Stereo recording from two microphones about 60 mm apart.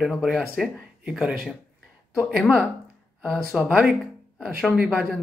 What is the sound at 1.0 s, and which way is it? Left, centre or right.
Speech, centre.